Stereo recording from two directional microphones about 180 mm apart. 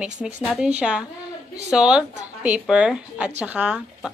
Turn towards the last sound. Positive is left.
turn(degrees=-5)  # may be behind; listen again after turning